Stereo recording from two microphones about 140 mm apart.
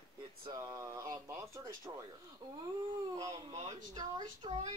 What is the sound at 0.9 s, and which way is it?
Speech, 25° right (ahead or behind).